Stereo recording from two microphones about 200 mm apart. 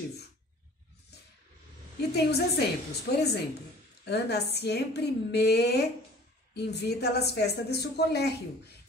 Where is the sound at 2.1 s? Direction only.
55° left (ahead or behind).